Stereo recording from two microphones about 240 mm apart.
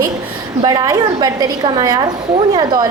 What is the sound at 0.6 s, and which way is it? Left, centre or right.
A woman's voice, centre.